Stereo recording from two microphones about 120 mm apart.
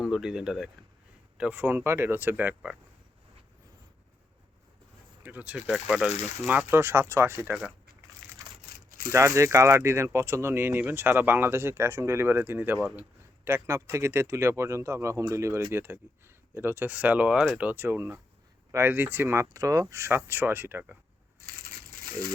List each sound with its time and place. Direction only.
0.0 s speech: 5° right (ahead or behind)
5.2 s speech: 15° right (ahead or behind)
6.4 s speech: 15° right (ahead or behind)
9.0 s speech: 25° right (ahead or behind); by 17.7 s 5° right (ahead or behind)
17.7 s speech: 20° right (ahead or behind)